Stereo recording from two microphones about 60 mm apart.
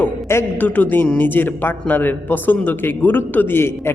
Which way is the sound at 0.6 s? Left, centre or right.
Left.